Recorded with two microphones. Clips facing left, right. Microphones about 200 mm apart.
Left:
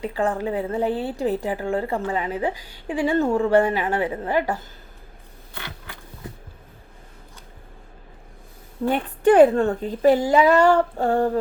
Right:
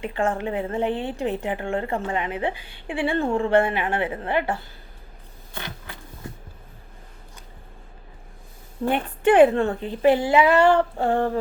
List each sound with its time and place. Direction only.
0.0 s a woman's voice: 35° left (ahead or behind)
8.9 s a woman's voice: 40° left (ahead or behind)